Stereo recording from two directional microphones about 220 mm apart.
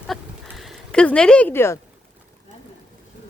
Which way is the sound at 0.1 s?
Centre (ahead or behind).